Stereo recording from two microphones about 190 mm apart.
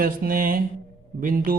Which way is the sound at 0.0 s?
50° right (ahead or behind).